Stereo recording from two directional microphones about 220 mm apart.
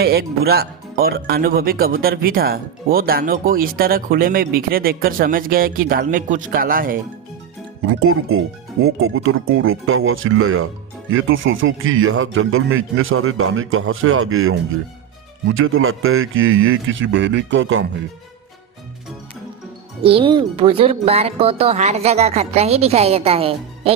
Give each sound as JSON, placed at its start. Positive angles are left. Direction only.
{"t": 0.0, "sound": "speech", "side_deg": -45}
{"t": 7.9, "sound": "a man's voice", "side_deg": -70}
{"t": 20.0, "sound": "speech", "side_deg": -25}